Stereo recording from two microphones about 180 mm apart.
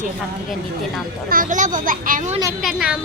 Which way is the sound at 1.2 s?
50° right (ahead or behind).